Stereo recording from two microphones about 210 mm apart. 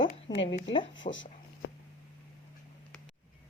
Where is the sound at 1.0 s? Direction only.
35° left (ahead or behind).